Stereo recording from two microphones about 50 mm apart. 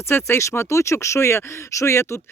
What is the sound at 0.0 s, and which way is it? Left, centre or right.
A man's voice, left.